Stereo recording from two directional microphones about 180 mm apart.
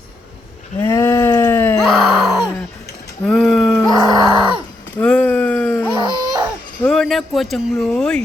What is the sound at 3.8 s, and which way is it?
Groan, 20° right (ahead or behind).